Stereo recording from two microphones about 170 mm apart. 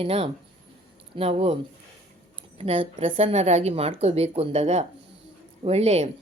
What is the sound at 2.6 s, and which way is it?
Speech, 35° right (ahead or behind).